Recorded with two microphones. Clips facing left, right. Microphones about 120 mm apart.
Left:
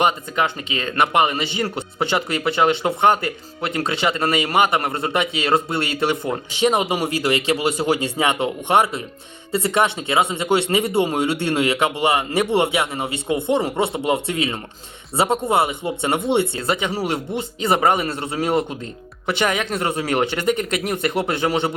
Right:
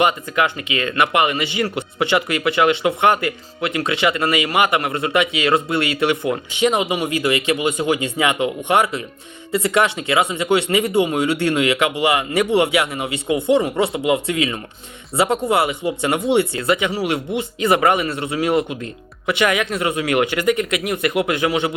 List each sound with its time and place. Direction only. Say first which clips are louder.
0.0 s speech: right 2 dB; 30° left (ahead or behind)